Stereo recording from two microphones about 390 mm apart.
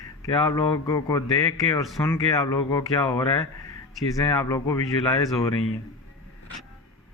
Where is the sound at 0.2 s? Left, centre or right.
Centre.